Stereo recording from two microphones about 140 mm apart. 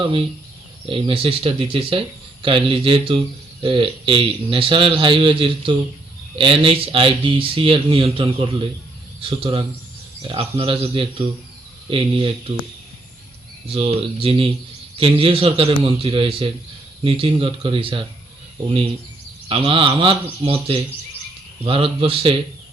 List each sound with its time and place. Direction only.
0.9 s speech: 40° right (ahead or behind)
13.7 s speech: 40° right (ahead or behind)
19.5 s speech: 40° right (ahead or behind)